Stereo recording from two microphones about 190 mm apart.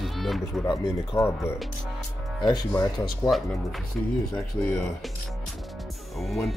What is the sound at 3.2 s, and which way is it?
Speech, centre (ahead or behind).